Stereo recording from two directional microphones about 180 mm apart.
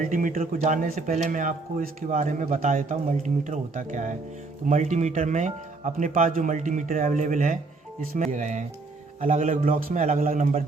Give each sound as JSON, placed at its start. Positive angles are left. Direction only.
{"t": 0.0, "sound": "a man's voice", "side_deg": -50}